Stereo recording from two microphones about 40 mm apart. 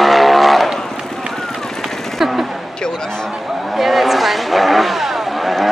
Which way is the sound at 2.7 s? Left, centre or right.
Centre.